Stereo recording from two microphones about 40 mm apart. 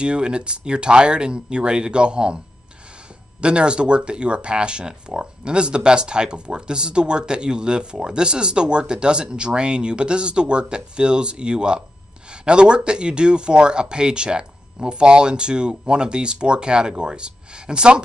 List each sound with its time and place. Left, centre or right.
0.0 s speech: right